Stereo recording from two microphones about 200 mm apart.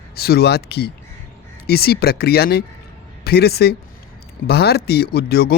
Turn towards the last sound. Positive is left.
turn(degrees=50)  # may be behind; listen again after turning